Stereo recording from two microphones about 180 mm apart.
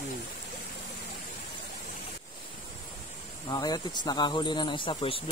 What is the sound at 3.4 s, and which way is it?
Speech, 20° left (ahead or behind).